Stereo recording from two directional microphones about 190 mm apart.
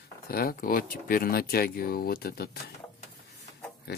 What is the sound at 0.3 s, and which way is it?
Speech, 50° left (ahead or behind).